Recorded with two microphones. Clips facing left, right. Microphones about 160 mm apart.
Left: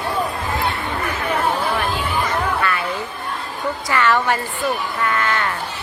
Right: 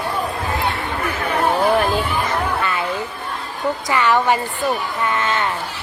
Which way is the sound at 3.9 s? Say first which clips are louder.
Right 1 dB; 15° right (ahead or behind).